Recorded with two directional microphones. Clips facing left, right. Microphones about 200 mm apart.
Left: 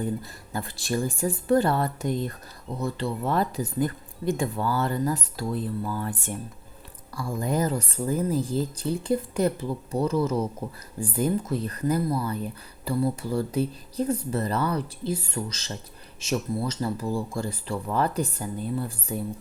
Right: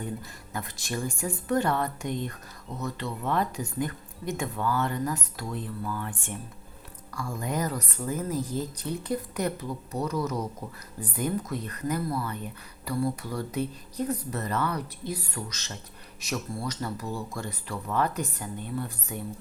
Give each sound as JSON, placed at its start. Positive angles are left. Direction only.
{"t": 0.5, "sound": "speech", "side_deg": 35}